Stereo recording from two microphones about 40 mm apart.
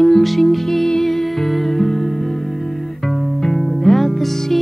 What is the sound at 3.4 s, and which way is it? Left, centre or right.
Music, centre.